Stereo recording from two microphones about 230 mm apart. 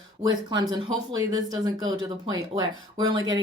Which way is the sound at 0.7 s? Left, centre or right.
Centre.